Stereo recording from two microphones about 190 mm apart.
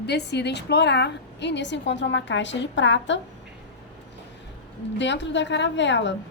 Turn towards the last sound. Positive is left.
turn(degrees=70)  # may be behind; listen again after turning